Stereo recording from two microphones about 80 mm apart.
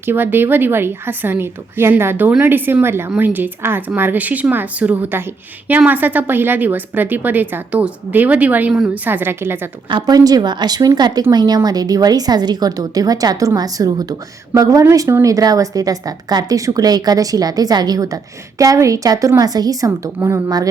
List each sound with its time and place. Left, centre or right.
0.0 s a woman's voice: right
9.9 s a woman's voice: right
20.2 s a woman's voice: right